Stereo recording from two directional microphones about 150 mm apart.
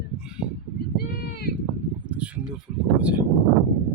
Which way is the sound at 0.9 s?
90° left.